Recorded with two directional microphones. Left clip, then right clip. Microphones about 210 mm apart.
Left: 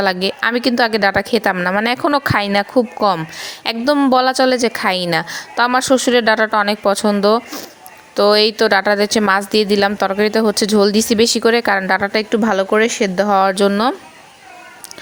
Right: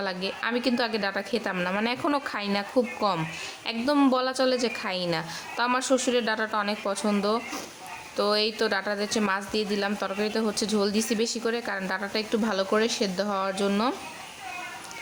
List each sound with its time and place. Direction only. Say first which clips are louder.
0.0 s speech: left 13 dB; 40° left (ahead or behind)